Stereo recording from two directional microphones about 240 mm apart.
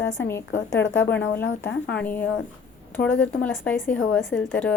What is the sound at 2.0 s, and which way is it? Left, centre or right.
Speech, centre.